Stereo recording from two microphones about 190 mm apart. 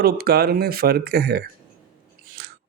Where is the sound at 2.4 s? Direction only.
55° right (ahead or behind).